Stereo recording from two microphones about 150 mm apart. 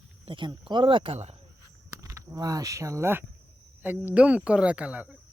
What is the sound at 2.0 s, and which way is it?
Speech, 20° right (ahead or behind).